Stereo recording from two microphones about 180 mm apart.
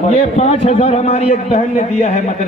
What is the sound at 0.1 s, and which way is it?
A man's voice, 35° left (ahead or behind).